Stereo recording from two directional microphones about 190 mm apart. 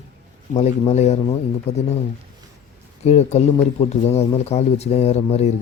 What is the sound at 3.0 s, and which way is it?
Speech, 35° left (ahead or behind).